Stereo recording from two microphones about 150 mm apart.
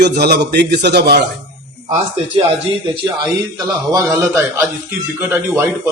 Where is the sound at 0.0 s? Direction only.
90° right.